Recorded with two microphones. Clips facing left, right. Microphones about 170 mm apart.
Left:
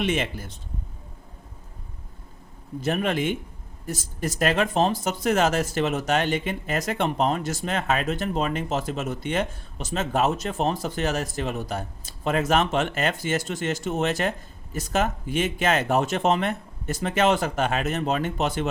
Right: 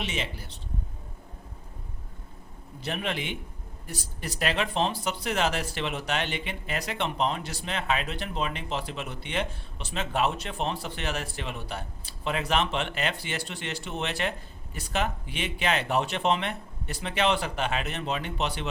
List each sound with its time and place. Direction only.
0.0 s speech: 50° left (ahead or behind)
2.8 s speech: 45° left (ahead or behind)